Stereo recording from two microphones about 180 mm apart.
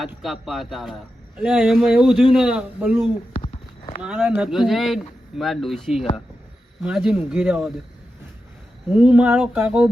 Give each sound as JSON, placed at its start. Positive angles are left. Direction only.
{"t": 0.0, "sound": "a man's voice", "side_deg": 0}
{"t": 3.3, "sound": "a sound", "side_deg": 40}
{"t": 4.0, "sound": "a man's voice", "side_deg": -5}
{"t": 9.0, "sound": "speech", "side_deg": -5}